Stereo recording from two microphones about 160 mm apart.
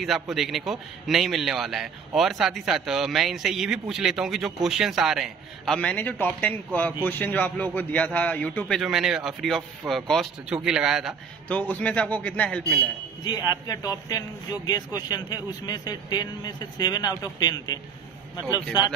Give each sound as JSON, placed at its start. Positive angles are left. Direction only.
{"t": 0.0, "sound": "a man's voice", "side_deg": 0}
{"t": 5.8, "sound": "a man's voice", "side_deg": 10}
{"t": 11.4, "sound": "a man's voice", "side_deg": 10}
{"t": 13.2, "sound": "speech", "side_deg": 25}